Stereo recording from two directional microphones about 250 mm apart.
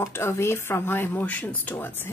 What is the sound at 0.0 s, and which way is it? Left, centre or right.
A woman's voice, centre.